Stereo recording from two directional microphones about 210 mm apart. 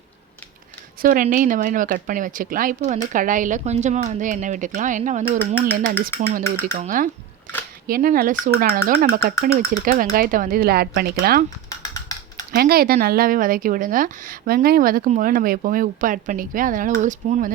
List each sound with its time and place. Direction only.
1.0 s speech: 40° right (ahead or behind)
9.5 s speech: 30° right (ahead or behind)
12.5 s speech: 45° right (ahead or behind)